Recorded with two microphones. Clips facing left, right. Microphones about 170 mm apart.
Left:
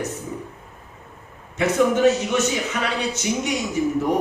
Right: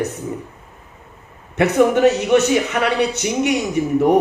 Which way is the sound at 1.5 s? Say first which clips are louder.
Right 4 dB; 65° right (ahead or behind).